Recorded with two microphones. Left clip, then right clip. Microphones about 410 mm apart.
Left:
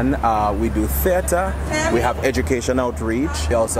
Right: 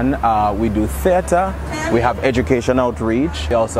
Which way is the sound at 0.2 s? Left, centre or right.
Right.